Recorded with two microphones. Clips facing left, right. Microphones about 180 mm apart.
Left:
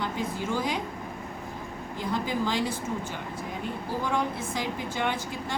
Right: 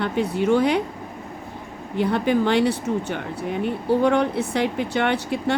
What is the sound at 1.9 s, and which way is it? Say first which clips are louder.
Speech: right 9 dB; 65° right (ahead or behind).